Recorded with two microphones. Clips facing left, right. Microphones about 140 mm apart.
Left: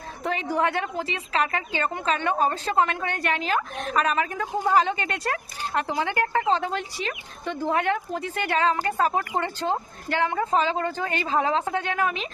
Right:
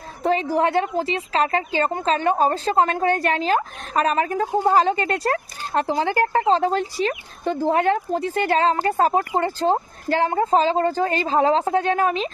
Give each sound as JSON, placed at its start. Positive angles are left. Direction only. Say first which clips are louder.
{"t": 0.2, "sound": "speech", "louder": "right 5 dB", "side_deg": -35}